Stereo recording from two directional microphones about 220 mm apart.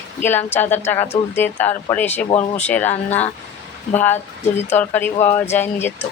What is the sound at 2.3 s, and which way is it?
Speech, 30° left (ahead or behind).